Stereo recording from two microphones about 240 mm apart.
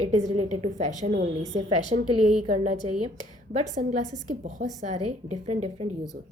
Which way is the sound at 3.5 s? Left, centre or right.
Right.